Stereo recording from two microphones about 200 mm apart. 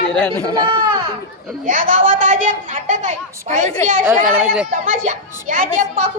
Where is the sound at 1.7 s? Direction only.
40° right (ahead or behind).